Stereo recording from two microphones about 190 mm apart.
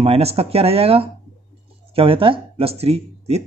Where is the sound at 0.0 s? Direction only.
30° right (ahead or behind).